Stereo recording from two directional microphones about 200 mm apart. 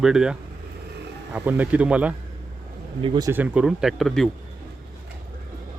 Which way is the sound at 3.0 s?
25° right (ahead or behind).